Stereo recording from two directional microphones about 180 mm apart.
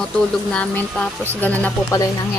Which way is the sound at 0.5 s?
5° left (ahead or behind).